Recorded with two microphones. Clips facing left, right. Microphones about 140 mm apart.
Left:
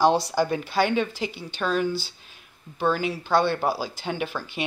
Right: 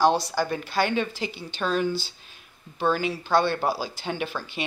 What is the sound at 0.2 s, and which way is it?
Speech, 20° left (ahead or behind).